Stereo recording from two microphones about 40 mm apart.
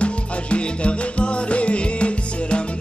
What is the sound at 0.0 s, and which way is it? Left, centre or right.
Music, left.